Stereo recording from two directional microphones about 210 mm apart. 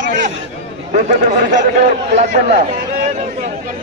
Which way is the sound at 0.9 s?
40° right (ahead or behind).